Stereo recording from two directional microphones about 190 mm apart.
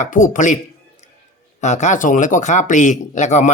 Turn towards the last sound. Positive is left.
turn(degrees=40)  # may be behind; listen again after turning